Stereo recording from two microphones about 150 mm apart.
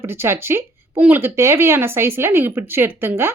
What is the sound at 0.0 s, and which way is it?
Speech, 15° right (ahead or behind).